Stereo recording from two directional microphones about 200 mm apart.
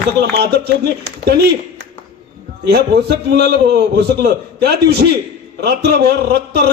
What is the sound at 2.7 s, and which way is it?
A man's voice, 55° right (ahead or behind).